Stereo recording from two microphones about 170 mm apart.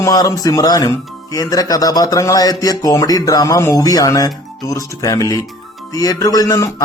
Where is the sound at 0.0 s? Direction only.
20° left (ahead or behind).